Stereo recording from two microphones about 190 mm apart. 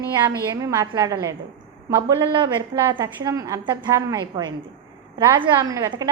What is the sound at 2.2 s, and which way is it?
A woman's voice, 25° right (ahead or behind).